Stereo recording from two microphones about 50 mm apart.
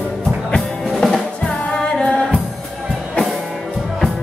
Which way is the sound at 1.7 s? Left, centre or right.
Centre.